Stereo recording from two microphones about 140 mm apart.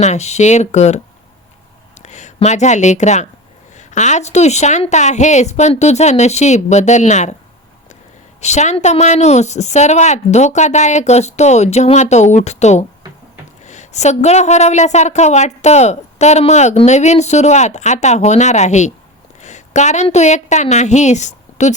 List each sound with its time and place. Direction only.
0.0 s a woman's voice: 55° left (ahead or behind)
8.4 s a woman's voice: 55° left (ahead or behind)